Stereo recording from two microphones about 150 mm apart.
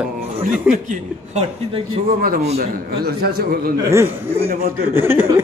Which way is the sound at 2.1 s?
80° right.